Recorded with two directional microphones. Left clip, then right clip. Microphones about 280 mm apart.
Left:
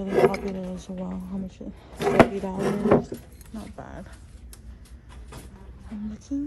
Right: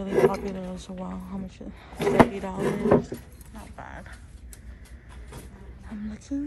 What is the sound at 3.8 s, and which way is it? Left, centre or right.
Speech, left.